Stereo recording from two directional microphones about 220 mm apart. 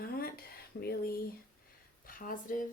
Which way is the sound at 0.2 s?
45° left (ahead or behind).